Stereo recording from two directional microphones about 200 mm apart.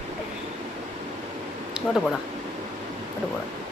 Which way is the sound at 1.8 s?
5° right (ahead or behind).